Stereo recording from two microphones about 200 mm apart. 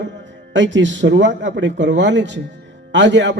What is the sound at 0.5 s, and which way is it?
A man's voice, 65° right (ahead or behind).